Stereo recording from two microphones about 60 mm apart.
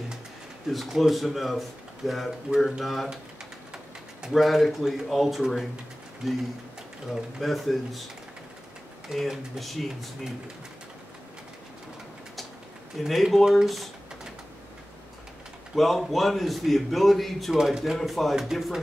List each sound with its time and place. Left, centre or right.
0.7 s a man's voice: centre
4.3 s a man's voice: centre
9.1 s a man's voice: centre
13.0 s a man's voice: centre
15.7 s a man's voice: centre